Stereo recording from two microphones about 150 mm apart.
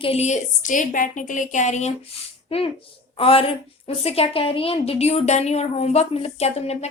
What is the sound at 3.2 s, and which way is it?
A woman's voice, 40° left (ahead or behind).